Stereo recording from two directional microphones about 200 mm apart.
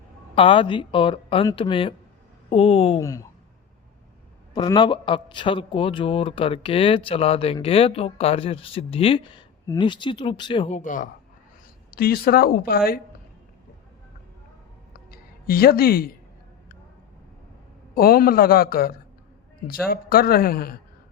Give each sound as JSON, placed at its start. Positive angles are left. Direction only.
{"t": 0.3, "sound": "speech", "side_deg": 25}
{"t": 3.0, "sound": "speech", "side_deg": 15}
{"t": 4.5, "sound": "speech", "side_deg": 20}
{"t": 15.1, "sound": "a sound", "side_deg": 50}
{"t": 17.9, "sound": "speech", "side_deg": 50}